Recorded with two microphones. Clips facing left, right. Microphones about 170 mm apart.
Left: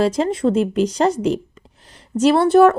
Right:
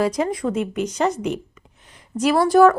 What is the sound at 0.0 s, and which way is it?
A woman's voice, 30° left (ahead or behind).